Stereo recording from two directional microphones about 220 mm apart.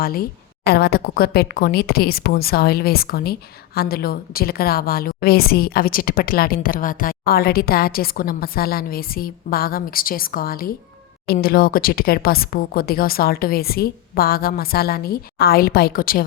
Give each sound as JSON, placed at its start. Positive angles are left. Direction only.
{"t": 0.0, "sound": "a woman's voice", "side_deg": 40}